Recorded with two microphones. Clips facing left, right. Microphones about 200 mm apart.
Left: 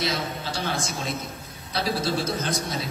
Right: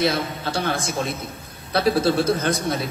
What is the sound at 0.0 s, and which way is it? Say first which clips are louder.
Speech: right 6 dB; 55° right (ahead or behind).